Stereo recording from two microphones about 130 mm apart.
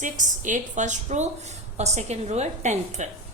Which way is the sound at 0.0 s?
75° right (ahead or behind).